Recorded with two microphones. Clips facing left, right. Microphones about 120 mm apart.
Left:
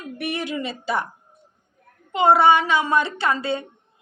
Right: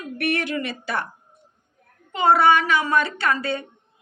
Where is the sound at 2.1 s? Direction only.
20° left (ahead or behind).